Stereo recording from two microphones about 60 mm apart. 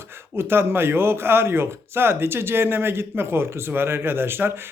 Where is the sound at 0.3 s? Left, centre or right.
Right.